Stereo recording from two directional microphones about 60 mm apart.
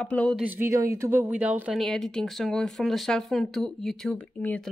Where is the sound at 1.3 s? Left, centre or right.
Right.